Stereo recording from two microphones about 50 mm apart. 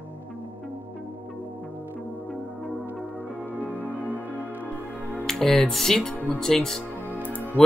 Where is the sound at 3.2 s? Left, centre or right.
Centre.